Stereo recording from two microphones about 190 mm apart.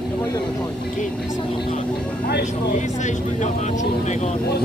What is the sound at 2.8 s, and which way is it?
Vehicle, 40° left (ahead or behind).